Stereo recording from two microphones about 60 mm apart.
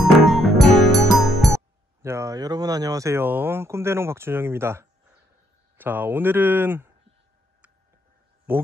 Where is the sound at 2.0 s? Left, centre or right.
Right.